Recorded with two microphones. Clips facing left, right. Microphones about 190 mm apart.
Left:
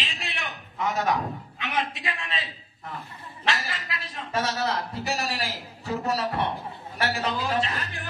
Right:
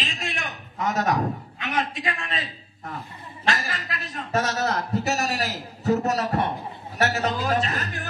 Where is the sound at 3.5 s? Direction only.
45° right (ahead or behind).